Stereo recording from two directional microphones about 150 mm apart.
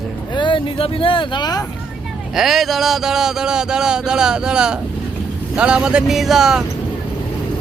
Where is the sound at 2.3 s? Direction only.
Centre (ahead or behind).